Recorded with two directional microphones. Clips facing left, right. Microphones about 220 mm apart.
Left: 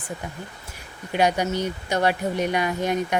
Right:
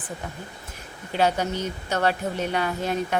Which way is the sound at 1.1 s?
15° left (ahead or behind).